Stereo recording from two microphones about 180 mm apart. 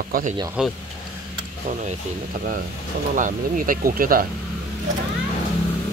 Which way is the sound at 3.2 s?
50° right (ahead or behind).